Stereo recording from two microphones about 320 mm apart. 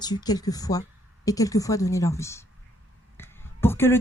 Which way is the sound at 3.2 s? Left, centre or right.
Centre.